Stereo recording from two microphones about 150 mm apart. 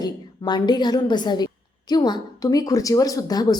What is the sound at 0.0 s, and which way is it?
Speech, 30° left (ahead or behind).